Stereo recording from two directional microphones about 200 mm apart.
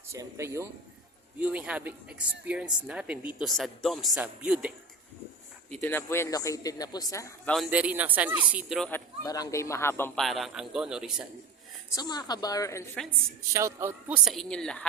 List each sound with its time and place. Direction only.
0.1 s speech: 15° right (ahead or behind)
5.7 s speech: 10° left (ahead or behind)
7.5 s speech: 5° right (ahead or behind)
8.9 s speech: 20° left (ahead or behind)
10.2 s speech: centre (ahead or behind)
11.9 s speech: 20° left (ahead or behind)
13.5 s speech: 15° right (ahead or behind)
14.3 s speech: centre (ahead or behind)